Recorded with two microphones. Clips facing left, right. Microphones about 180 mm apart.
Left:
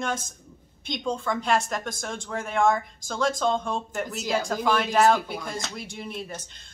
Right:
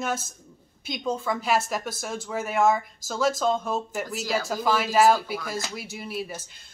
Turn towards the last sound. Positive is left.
turn(degrees=-5)  # may be behind; listen again after turning